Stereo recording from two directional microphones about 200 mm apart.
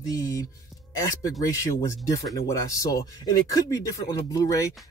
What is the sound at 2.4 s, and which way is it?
Speech, 15° left (ahead or behind).